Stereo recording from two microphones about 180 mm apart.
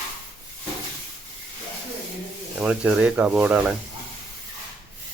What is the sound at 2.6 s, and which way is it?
Speech, 5° right (ahead or behind).